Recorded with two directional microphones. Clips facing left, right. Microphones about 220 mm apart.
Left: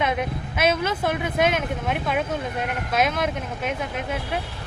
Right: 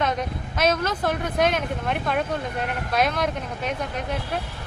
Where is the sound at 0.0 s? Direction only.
10° left (ahead or behind).